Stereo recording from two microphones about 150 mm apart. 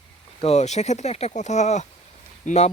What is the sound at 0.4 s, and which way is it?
Speech, 45° left (ahead or behind).